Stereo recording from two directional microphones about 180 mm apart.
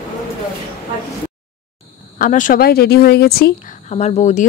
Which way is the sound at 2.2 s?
45° left (ahead or behind).